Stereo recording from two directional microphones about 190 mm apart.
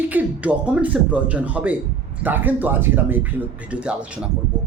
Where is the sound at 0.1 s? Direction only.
10° right (ahead or behind).